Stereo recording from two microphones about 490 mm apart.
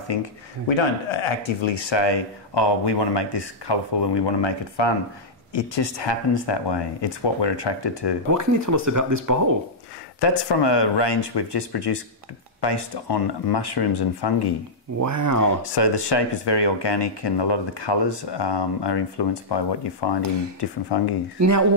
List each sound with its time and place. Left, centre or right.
0.7 s speech: left
8.3 s speech: right
10.2 s speech: left
15.0 s speech: right
15.7 s speech: left
21.4 s speech: right